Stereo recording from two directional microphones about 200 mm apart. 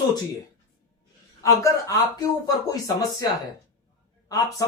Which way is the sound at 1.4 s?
15° left (ahead or behind).